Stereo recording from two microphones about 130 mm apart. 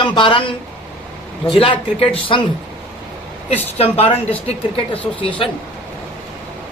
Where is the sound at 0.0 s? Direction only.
40° left (ahead or behind).